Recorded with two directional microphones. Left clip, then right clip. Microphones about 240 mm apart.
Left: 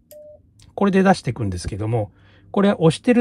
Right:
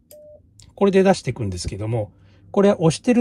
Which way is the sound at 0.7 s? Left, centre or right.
Centre.